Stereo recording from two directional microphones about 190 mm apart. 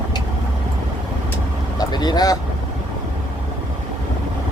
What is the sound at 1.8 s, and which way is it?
Vehicle, 20° left (ahead or behind).